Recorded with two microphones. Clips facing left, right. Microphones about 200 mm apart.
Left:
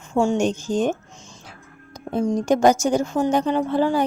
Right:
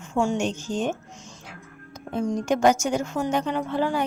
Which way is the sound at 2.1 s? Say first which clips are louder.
Left 4 dB; 35° left (ahead or behind).